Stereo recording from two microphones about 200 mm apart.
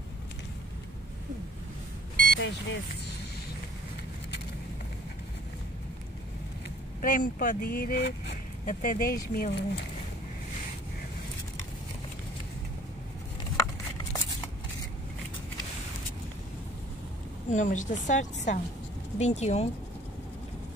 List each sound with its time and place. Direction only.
2.3 s speech: 60° left (ahead or behind)
7.0 s speech: 45° left (ahead or behind)
17.5 s a woman's voice: 40° left (ahead or behind)